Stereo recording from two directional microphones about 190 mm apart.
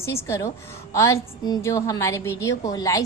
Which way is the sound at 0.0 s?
15° left (ahead or behind).